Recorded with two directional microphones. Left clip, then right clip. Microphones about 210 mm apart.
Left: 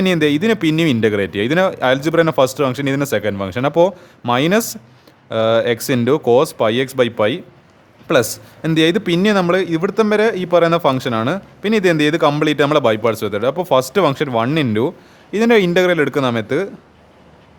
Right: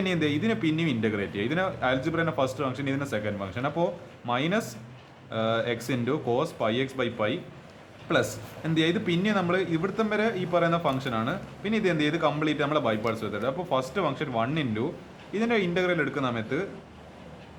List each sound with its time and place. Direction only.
0.0 s a man's voice: 50° left (ahead or behind)